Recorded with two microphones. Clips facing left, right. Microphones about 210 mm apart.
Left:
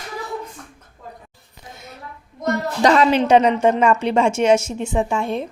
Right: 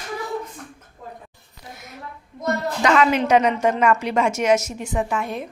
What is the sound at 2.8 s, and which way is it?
A woman's voice, 35° left (ahead or behind).